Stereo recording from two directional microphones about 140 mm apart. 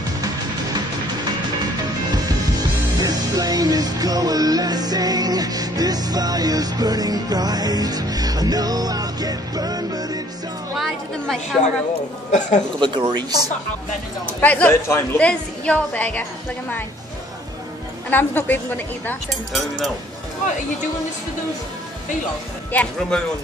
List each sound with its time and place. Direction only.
1.6 s music: 30° right (ahead or behind)
10.8 s a woman's voice: centre (ahead or behind)
12.3 s speech: 60° left (ahead or behind)
12.8 s speech: 30° right (ahead or behind)
14.2 s a woman's voice: 10° left (ahead or behind)
18.1 s a woman's voice: 15° left (ahead or behind)
22.7 s a woman's voice: 10° left (ahead or behind)